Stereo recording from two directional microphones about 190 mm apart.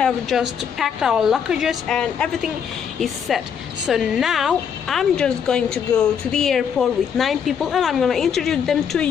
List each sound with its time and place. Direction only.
0.0 s a woman's voice: centre (ahead or behind)